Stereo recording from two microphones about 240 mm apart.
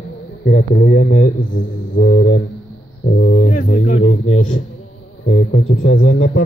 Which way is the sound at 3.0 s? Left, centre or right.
Left.